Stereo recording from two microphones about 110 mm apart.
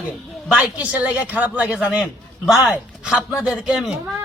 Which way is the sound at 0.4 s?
5° right (ahead or behind).